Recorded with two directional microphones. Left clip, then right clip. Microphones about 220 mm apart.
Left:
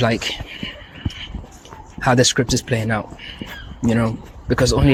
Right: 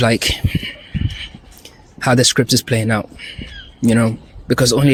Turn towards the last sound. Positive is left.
turn(degrees=-55)  # may be behind; listen again after turning